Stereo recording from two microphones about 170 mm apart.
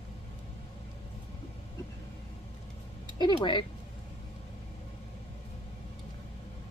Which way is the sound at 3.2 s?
25° left (ahead or behind).